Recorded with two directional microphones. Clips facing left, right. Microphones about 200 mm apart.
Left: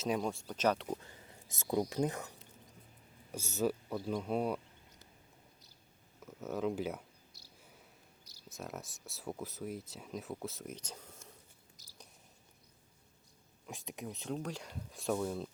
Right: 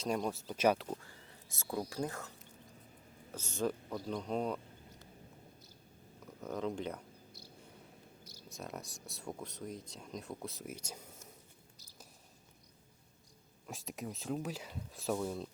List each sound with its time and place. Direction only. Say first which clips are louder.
0.0 s speech: left 1 dB; 5° left (ahead or behind)
0.9 s speech: left 2 dB; 20° left (ahead or behind)
3.3 s speech: left 2 dB; 10° left (ahead or behind)
6.4 s speech: left 2 dB; 5° left (ahead or behind)
7.4 s cricket: right 8 dB; 55° right (ahead or behind)
8.2 s a sound: right 8 dB; 50° right (ahead or behind)
8.4 s speech: left 1 dB; centre (ahead or behind)
13.7 s speech: right 1 dB; centre (ahead or behind)